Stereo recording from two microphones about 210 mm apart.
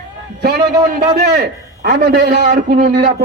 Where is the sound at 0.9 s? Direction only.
45° right (ahead or behind).